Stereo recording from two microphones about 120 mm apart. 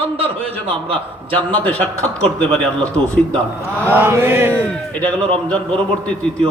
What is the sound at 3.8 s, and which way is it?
Chant, 20° right (ahead or behind).